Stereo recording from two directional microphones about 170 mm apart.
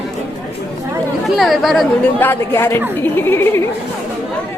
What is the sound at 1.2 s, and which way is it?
Chatter, centre (ahead or behind).